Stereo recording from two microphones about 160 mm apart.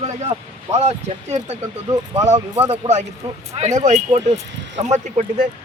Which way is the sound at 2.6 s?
45° right (ahead or behind).